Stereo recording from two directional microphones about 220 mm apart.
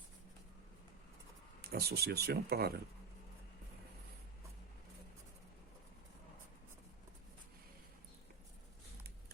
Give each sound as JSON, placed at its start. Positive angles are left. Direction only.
{"t": 1.6, "sound": "speech", "side_deg": -45}